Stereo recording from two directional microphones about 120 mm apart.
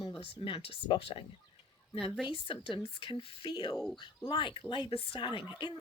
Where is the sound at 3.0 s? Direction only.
45° left (ahead or behind).